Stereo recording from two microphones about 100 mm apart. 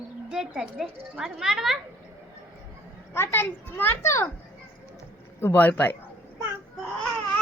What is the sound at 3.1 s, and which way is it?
Speech, 20° left (ahead or behind).